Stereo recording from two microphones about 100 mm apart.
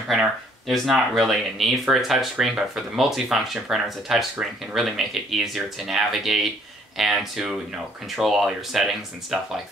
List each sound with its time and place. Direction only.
0.1 s speech: centre (ahead or behind)